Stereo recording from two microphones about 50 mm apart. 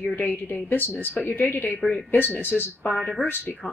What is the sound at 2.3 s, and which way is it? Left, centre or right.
Speech, left.